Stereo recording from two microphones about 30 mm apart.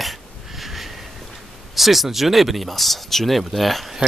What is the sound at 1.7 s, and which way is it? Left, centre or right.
Speech, centre.